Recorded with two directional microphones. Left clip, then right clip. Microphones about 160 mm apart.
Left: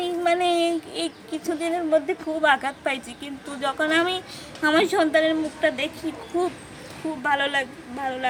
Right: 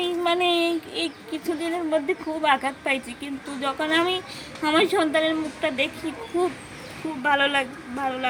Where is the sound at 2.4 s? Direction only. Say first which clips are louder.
Left 1 dB; 20° left (ahead or behind).